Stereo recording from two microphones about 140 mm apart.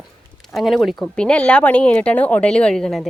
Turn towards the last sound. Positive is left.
turn(degrees=0)  # may be behind; listen again after turning